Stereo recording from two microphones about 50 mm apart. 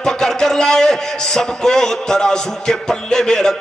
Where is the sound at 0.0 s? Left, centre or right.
Centre.